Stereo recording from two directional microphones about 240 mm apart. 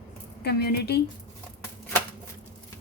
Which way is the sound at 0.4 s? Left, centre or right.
Left.